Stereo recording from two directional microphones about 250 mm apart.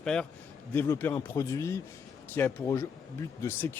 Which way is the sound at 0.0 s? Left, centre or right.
Centre.